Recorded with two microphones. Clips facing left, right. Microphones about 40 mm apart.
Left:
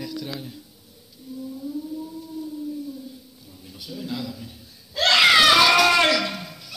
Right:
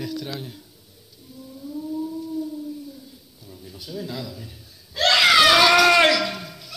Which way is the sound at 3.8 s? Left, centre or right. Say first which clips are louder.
Right 2 dB; right.